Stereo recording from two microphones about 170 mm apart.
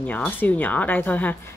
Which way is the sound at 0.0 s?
10° left (ahead or behind).